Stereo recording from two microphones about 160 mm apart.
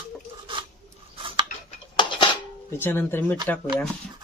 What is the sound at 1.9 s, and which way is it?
Dishes, 30° left (ahead or behind).